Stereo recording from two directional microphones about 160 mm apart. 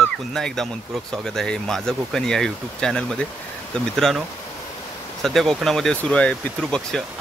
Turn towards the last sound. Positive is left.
turn(degrees=5)  # may be behind; listen again after turning